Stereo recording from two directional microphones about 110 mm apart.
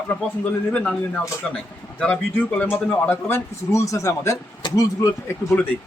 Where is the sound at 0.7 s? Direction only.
10° left (ahead or behind); by 5.4 s 30° left (ahead or behind).